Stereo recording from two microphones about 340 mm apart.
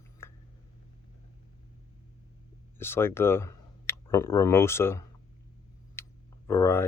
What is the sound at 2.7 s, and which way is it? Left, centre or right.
Speech, centre.